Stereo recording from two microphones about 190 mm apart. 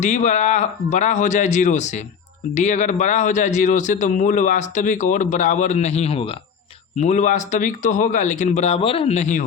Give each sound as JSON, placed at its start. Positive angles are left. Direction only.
{"t": 0.0, "sound": "a man's voice", "side_deg": 40}